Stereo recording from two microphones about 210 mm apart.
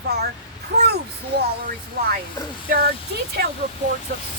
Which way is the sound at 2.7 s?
50° right (ahead or behind).